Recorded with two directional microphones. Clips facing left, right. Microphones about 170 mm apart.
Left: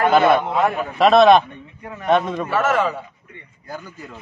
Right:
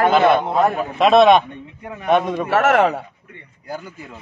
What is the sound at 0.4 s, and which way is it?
Speech, 35° right (ahead or behind).